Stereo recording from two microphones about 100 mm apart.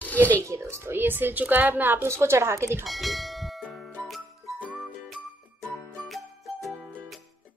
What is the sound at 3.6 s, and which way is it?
Music, 10° left (ahead or behind).